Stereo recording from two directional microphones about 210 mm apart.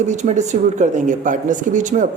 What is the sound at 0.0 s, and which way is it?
Speech, 35° right (ahead or behind).